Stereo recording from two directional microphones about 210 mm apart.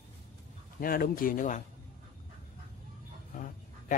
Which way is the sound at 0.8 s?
45° left (ahead or behind).